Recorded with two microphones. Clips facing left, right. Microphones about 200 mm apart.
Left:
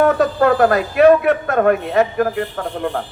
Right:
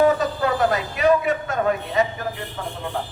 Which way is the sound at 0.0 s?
60° left (ahead or behind).